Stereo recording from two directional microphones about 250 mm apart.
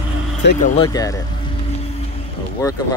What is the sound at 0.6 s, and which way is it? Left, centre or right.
Speech, left.